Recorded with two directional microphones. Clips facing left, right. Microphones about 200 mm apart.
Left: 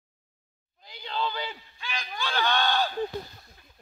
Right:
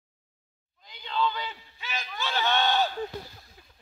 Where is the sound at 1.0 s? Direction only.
40° left (ahead or behind).